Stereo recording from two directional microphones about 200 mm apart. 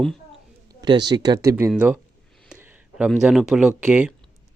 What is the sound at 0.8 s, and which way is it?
Speech, 20° right (ahead or behind).